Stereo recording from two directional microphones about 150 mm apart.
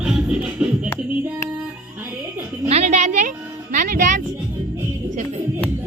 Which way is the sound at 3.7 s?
65° right (ahead or behind).